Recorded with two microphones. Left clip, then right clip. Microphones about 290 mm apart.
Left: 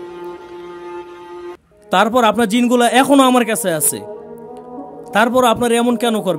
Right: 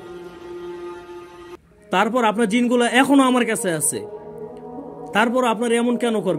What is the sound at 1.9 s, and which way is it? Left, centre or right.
A man's voice, left.